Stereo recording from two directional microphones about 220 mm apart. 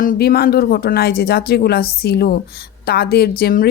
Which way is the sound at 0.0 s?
40° left (ahead or behind).